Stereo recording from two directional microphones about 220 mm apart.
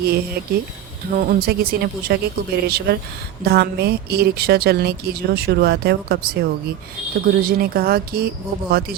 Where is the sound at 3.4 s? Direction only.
45° right (ahead or behind).